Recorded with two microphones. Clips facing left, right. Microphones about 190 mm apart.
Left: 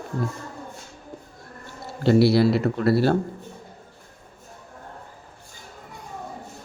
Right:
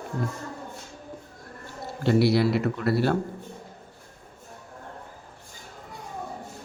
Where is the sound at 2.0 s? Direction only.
35° left (ahead or behind).